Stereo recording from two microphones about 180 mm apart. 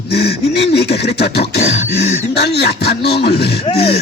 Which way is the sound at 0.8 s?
65° left (ahead or behind).